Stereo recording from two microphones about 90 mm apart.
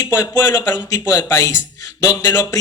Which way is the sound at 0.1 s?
30° left (ahead or behind).